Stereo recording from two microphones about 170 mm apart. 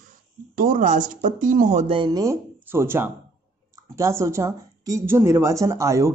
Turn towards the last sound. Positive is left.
turn(degrees=-20)  # may be behind; listen again after turning